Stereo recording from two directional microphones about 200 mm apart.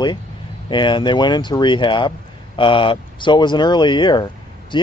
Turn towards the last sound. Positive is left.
turn(degrees=25)  # may be behind; listen again after turning